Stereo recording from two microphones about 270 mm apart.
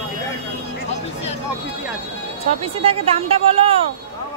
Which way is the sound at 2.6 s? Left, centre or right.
Right.